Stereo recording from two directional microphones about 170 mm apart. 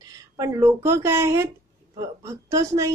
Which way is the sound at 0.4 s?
15° right (ahead or behind).